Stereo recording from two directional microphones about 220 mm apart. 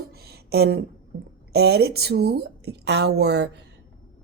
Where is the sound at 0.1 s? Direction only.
45° right (ahead or behind).